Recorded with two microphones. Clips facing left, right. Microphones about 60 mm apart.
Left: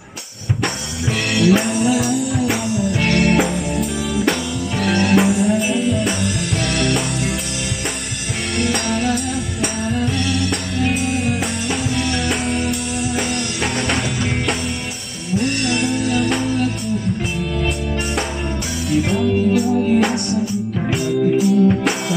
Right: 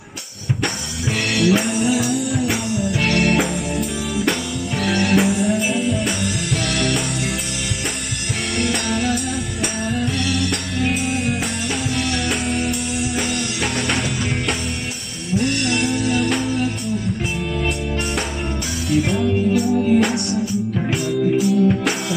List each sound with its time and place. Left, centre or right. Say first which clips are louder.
1.3 s music: left 2 dB; centre
8.5 s music: left 2 dB; centre
15.4 s music: left 1 dB; centre
18.9 s music: left 1 dB; centre